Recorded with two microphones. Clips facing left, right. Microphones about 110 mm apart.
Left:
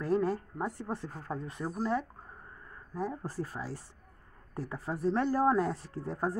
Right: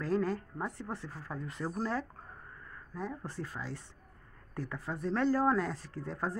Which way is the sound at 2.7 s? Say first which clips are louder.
Left 4 dB; 30° left (ahead or behind).